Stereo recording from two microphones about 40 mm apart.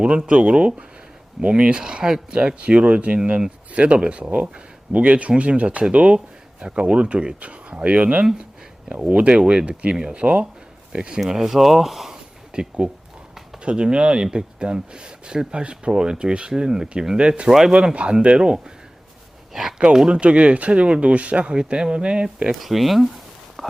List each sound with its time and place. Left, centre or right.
0.3 s speech: right
2.6 s speech: right
11.3 s speech: centre
12.5 s speech: right
19.9 s speech: centre
21.5 s speech: right
22.6 s a sound: centre